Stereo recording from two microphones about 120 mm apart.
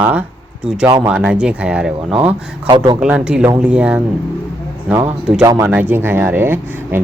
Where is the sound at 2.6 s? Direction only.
35° right (ahead or behind).